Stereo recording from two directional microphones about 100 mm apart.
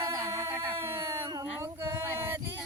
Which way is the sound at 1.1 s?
40° right (ahead or behind).